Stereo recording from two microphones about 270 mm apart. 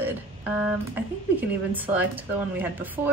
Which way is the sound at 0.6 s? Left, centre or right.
Centre.